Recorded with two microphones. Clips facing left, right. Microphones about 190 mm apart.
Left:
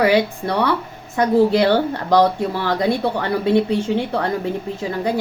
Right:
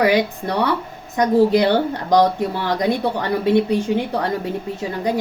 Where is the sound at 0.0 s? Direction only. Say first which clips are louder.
Left 1 dB; 15° right (ahead or behind).